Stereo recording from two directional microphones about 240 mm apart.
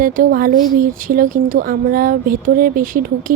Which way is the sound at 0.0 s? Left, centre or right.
Right.